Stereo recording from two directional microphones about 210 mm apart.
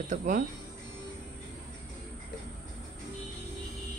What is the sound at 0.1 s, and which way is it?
Speech, 40° right (ahead or behind).